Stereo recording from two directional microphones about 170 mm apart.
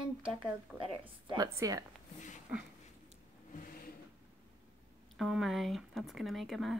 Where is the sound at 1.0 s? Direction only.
30° right (ahead or behind).